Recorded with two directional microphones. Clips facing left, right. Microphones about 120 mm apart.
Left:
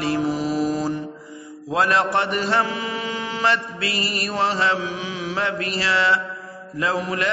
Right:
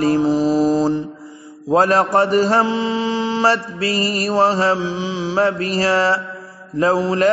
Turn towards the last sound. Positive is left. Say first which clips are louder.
# right 7 dB
turn(degrees=-35)  # may be behind; listen again after turning